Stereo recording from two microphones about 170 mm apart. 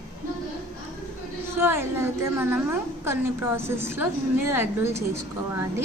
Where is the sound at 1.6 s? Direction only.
15° right (ahead or behind).